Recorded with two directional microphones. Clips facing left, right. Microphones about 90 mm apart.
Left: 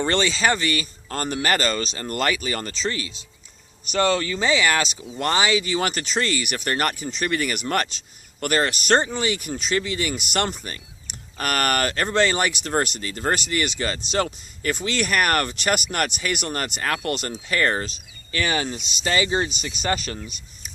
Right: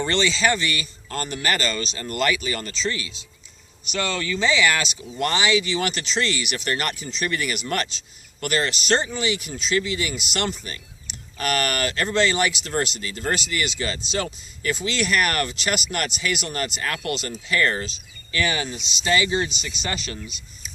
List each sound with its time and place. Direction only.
0.1 s speech: 45° left (ahead or behind)
16.9 s speech: 35° left (ahead or behind)
19.8 s speech: 45° left (ahead or behind)